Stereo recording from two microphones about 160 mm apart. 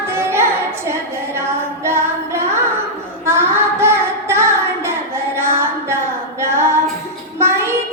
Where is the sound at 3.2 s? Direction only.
15° right (ahead or behind).